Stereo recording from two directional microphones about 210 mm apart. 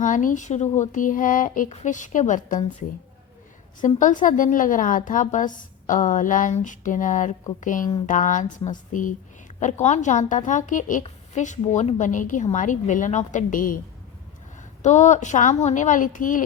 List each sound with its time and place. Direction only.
0.0 s a woman's voice: 40° left (ahead or behind)
3.8 s a woman's voice: 35° left (ahead or behind)
14.8 s a woman's voice: 35° left (ahead or behind)